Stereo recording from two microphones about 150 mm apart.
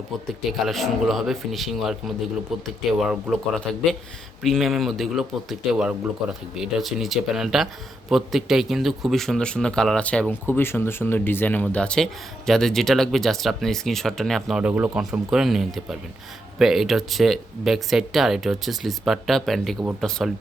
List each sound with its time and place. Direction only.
0.6 s speech: centre (ahead or behind)
4.4 s speech: centre (ahead or behind)